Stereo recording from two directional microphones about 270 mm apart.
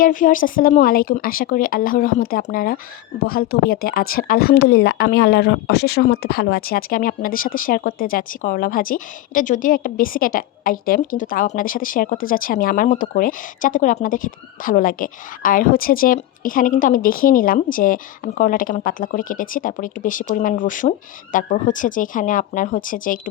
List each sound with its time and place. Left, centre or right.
0.0 s speech: left